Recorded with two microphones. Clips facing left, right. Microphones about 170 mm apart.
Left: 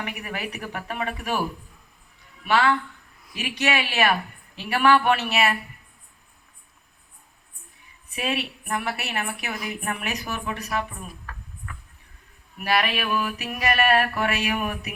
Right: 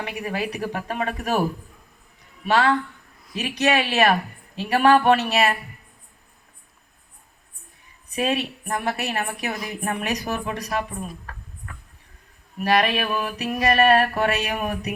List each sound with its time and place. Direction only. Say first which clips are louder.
0.0 s a woman's voice: right 5 dB; 35° right (ahead or behind)
2.5 s a woman's voice: right 2 dB; 40° right (ahead or behind)
8.1 s a woman's voice: right 4 dB; 40° right (ahead or behind)